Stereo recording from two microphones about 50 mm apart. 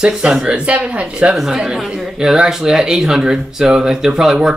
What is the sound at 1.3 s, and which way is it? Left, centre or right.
Speech, centre.